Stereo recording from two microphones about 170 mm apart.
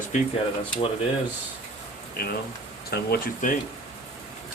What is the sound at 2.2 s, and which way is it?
Speech, 60° left (ahead or behind).